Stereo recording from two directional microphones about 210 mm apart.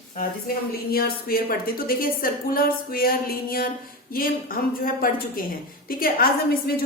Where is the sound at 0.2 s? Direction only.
45° left (ahead or behind).